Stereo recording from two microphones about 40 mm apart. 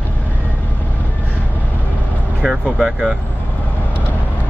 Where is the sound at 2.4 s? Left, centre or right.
Right.